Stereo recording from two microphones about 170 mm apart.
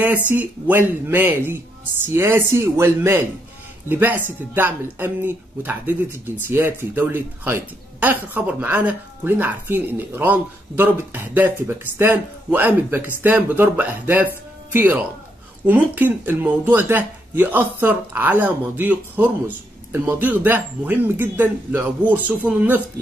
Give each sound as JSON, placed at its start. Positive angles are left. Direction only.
{"t": 0.3, "sound": "speech", "side_deg": -10}